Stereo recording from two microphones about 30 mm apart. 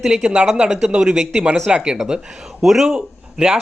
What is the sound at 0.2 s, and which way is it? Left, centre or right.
Speech, right.